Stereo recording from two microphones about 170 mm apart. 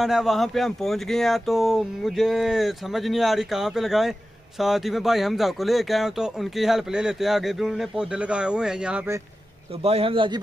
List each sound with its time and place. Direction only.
0.0 s speech: centre (ahead or behind)
9.8 s a man's voice: 35° right (ahead or behind)